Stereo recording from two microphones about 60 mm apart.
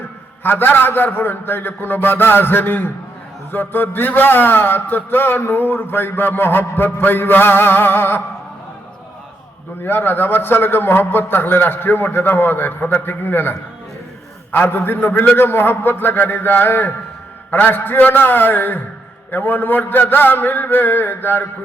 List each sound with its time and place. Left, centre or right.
0.4 s a man's voice: left
9.8 s a man's voice: left